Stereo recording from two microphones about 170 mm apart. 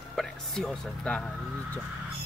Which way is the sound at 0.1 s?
5° left (ahead or behind).